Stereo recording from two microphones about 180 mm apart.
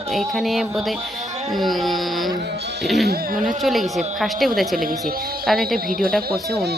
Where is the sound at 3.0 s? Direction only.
50° right (ahead or behind).